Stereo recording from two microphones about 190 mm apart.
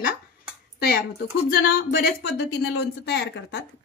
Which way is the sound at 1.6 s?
50° left (ahead or behind).